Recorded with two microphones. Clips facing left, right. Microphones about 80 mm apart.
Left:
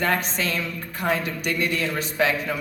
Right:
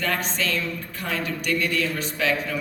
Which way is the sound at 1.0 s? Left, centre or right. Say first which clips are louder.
Left 6 dB; left.